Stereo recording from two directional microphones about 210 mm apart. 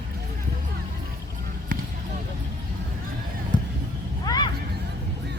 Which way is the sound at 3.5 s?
20° left (ahead or behind).